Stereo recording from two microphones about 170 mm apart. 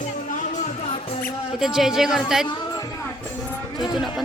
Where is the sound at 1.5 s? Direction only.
Centre (ahead or behind).